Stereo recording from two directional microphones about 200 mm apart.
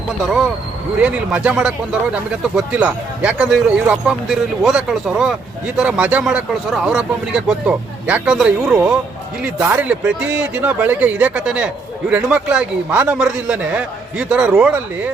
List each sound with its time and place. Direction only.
1.0 s speech: 5° right (ahead or behind)